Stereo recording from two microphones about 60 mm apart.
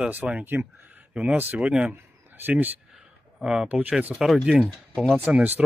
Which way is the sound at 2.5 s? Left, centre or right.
Right.